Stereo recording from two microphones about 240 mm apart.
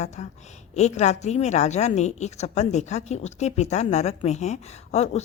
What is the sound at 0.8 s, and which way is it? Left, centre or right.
A woman's voice, left.